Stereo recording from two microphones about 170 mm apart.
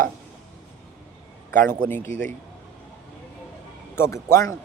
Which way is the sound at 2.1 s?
90° left.